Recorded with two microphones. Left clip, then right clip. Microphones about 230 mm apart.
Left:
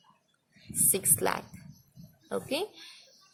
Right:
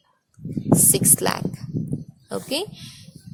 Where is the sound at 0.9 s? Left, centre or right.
Right.